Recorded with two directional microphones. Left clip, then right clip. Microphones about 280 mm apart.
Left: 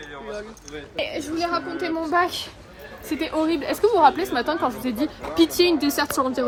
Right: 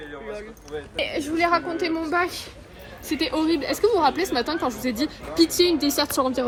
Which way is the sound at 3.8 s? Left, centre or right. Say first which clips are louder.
Left 4 dB; centre.